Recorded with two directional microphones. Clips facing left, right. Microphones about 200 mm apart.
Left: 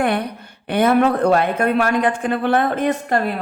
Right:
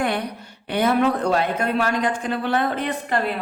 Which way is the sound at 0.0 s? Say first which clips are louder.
Left 4 dB; 55° left (ahead or behind).